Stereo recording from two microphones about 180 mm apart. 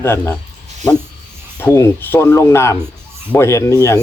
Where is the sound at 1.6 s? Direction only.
15° left (ahead or behind).